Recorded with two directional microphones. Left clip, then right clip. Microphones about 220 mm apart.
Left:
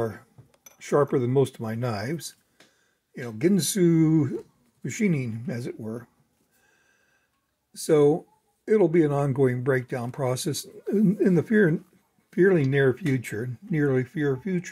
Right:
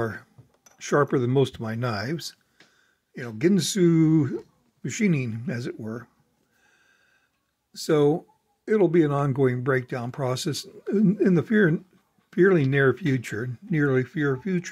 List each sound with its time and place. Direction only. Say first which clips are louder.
0.0 s speech: even; 15° right (ahead or behind)
7.7 s speech: left 1 dB; 10° right (ahead or behind)